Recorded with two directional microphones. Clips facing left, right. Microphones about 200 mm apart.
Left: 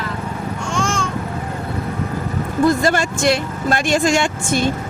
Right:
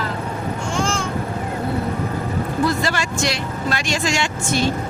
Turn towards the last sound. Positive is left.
turn(degrees=50)  # may be behind; listen again after turning